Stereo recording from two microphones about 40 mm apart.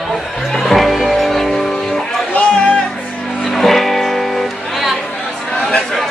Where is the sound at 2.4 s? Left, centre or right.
Left.